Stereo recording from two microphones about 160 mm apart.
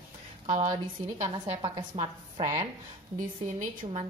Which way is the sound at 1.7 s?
25° right (ahead or behind).